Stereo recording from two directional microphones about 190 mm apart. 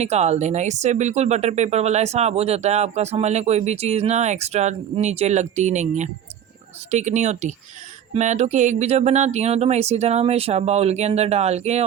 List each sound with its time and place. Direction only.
0.0 s speech: 35° right (ahead or behind)